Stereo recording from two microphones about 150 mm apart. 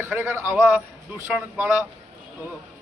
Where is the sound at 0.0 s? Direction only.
15° right (ahead or behind).